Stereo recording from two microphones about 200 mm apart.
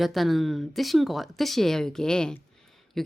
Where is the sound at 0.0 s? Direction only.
Centre (ahead or behind).